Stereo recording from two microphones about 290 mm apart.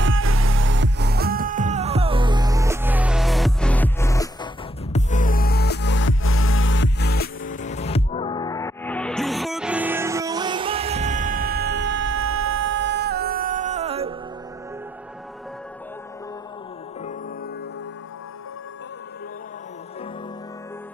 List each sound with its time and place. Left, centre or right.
0.0 s music: right; by 4.5 s centre
4.9 s music: left; by 14.1 s right